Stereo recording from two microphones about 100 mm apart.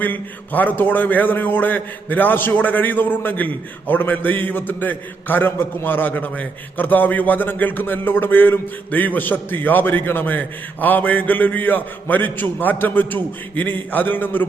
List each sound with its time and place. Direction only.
0.0 s a man's voice: 15° left (ahead or behind)